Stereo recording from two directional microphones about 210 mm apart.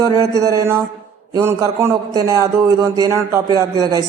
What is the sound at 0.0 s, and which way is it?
A man's voice, 15° right (ahead or behind).